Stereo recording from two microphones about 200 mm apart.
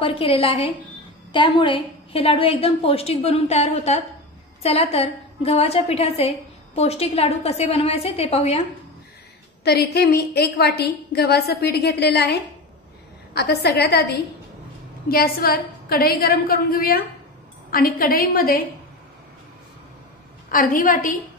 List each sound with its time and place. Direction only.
0.0 s a woman's voice: 25° left (ahead or behind)
9.7 s a woman's voice: 55° left (ahead or behind)
20.5 s a woman's voice: 40° left (ahead or behind)